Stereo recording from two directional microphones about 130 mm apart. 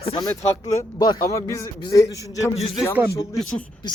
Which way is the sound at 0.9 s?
30° left (ahead or behind).